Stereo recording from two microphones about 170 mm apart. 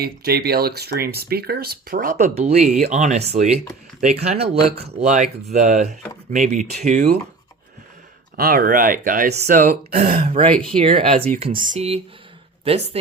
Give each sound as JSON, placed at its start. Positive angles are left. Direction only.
{"t": 0.0, "sound": "speech", "side_deg": -65}
{"t": 8.4, "sound": "speech", "side_deg": -60}
{"t": 9.3, "sound": "speech", "side_deg": -45}
{"t": 10.8, "sound": "speech", "side_deg": -35}